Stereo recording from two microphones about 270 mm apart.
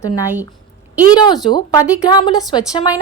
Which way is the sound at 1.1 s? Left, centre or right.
Centre.